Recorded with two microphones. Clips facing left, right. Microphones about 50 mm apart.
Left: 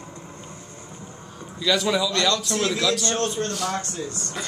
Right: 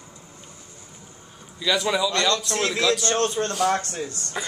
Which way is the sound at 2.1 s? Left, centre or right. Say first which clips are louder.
Even; right.